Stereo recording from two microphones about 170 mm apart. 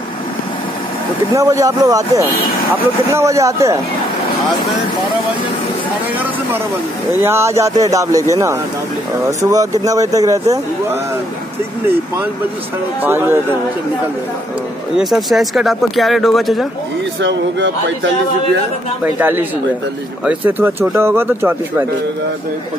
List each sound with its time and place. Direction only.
1.3 s speech: 20° right (ahead or behind)
7.2 s speech: 15° right (ahead or behind)
13.0 s speech: 15° right (ahead or behind)
15.0 s speech: centre (ahead or behind)
17.2 s a man's voice: 90° right
19.0 s speech: 10° right (ahead or behind)